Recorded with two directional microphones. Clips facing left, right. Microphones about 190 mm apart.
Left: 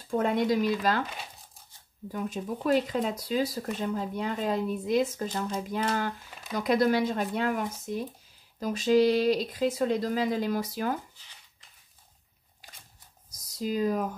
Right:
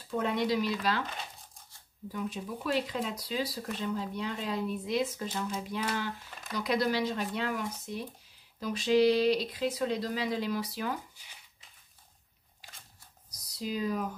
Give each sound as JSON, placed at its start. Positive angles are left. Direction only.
{"t": 0.1, "sound": "speech", "side_deg": 45}
{"t": 2.1, "sound": "speech", "side_deg": 45}
{"t": 13.3, "sound": "a sound", "side_deg": 45}